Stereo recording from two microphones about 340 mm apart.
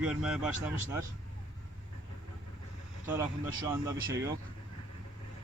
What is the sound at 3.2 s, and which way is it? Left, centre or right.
Speech, centre.